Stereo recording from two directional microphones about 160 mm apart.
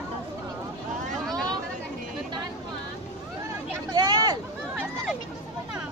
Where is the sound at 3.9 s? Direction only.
25° right (ahead or behind).